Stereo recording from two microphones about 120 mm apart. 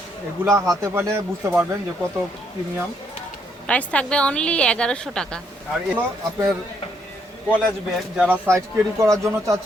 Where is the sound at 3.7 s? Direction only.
10° left (ahead or behind).